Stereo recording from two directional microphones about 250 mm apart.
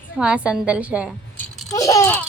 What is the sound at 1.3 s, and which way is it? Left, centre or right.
Babbling, centre.